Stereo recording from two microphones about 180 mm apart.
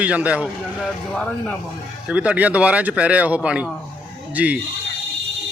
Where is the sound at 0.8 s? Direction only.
5° left (ahead or behind).